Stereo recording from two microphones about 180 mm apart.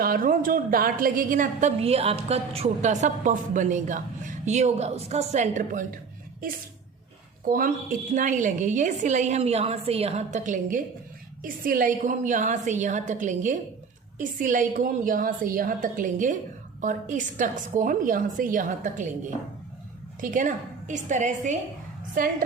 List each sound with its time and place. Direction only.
0.0 s a woman's voice: 50° right (ahead or behind)
7.4 s a woman's voice: 50° right (ahead or behind)
20.2 s a woman's voice: 45° right (ahead or behind)